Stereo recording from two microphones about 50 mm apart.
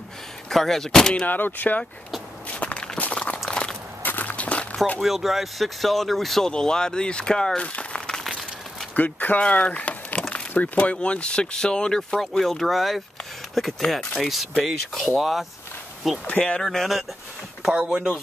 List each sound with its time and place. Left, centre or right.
0.5 s speech: centre
1.2 s speech: left
2.5 s walk: left
3.4 s biting: centre
4.0 s walk: left
5.0 s speech: centre; by 11.0 s left
11.0 s speech: left
12.2 s speech: centre
16.3 s speech: left
16.6 s speech: centre
17.7 s speech: centre